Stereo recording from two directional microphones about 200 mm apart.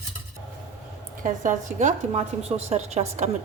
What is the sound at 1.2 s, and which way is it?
Speech, 40° right (ahead or behind).